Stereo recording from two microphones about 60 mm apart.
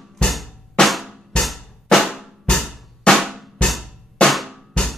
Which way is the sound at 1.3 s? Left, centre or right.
Centre.